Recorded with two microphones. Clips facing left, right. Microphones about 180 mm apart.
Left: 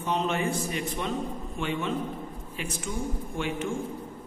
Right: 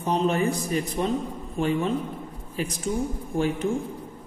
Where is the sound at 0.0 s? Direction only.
35° right (ahead or behind).